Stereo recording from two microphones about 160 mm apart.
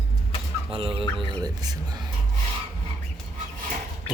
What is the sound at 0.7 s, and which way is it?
Speech, 35° right (ahead or behind).